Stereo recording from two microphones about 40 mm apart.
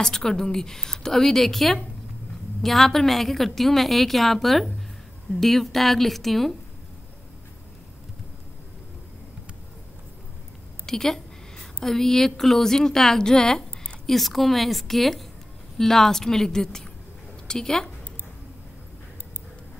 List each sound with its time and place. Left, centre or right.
0.0 s a woman's voice: centre
10.9 s a sound: centre
12.3 s a woman's voice: centre
14.0 s a woman's voice: centre